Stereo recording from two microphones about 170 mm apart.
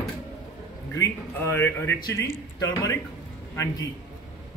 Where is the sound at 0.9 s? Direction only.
15° left (ahead or behind).